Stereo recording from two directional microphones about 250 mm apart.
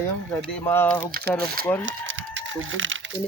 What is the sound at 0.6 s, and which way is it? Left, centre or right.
Speech, centre.